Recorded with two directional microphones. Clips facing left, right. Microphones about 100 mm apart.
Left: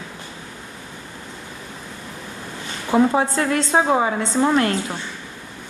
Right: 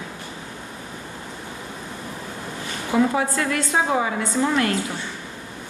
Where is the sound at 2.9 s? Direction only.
30° left (ahead or behind).